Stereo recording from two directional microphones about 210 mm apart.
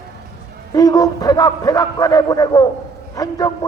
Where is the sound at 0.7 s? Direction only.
15° left (ahead or behind).